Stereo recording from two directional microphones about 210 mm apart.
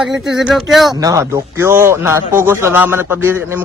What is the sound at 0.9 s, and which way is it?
Speech, 15° right (ahead or behind).